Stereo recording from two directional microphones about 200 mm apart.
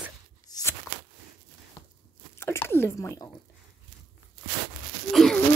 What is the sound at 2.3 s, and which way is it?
Speech, 10° left (ahead or behind).